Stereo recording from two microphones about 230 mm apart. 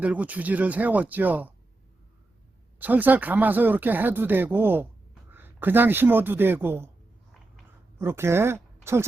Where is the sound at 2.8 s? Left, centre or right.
Centre.